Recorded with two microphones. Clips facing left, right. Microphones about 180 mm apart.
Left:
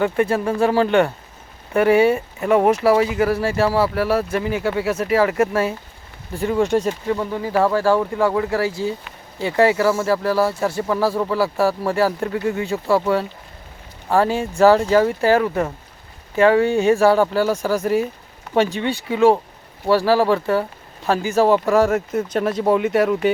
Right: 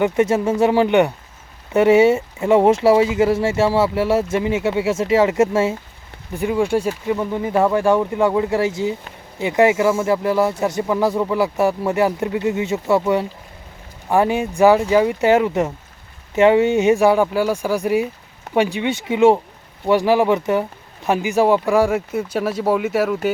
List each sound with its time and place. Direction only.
0.0 s speech: 20° right (ahead or behind)
6.3 s speech: 10° right (ahead or behind)